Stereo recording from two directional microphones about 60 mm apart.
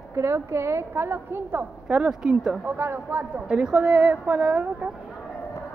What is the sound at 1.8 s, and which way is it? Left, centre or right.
Speech, centre.